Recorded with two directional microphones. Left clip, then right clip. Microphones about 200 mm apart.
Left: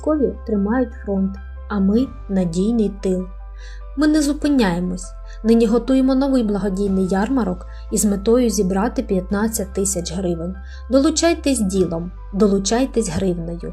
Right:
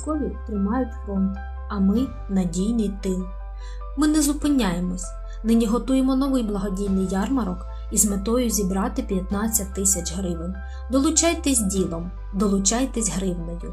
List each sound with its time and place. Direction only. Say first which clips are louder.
0.0 s a woman's voice: left 9 dB; 25° left (ahead or behind)